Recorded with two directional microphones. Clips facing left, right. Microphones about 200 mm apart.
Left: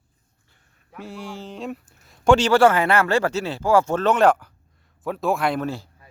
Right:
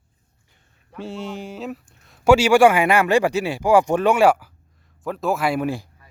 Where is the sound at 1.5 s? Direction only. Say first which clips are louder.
Right 1 dB; centre (ahead or behind).